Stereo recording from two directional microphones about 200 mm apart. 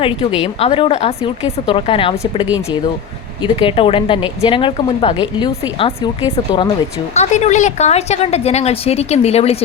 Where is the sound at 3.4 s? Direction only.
25° left (ahead or behind).